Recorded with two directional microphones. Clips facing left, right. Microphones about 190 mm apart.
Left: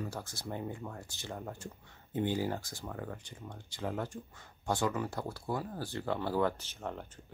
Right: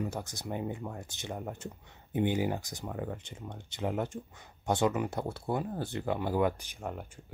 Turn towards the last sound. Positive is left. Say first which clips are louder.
# right 1 dB
turn(degrees=-10)  # may be behind; listen again after turning